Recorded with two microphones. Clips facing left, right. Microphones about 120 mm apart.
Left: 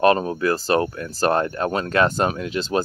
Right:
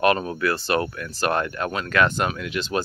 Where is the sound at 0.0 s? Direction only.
30° left (ahead or behind).